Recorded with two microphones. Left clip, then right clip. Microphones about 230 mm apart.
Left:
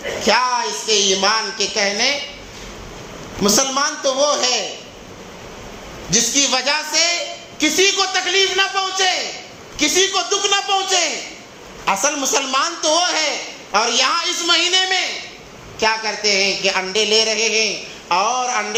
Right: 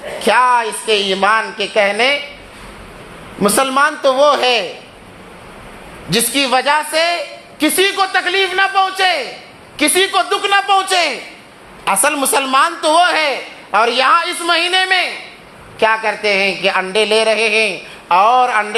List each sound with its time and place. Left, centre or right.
0.3 s a woman's voice: right
3.4 s a woman's voice: right
6.1 s a woman's voice: right